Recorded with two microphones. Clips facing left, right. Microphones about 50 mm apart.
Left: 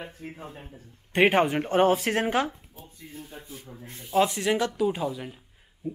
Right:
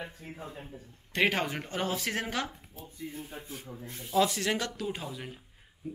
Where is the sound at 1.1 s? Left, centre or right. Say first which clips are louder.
Left 8 dB; left.